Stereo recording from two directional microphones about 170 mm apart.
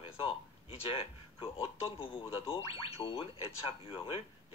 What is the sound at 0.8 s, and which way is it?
Speech, 30° left (ahead or behind).